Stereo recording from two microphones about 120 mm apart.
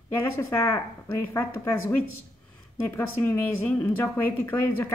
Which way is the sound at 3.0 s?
15° left (ahead or behind).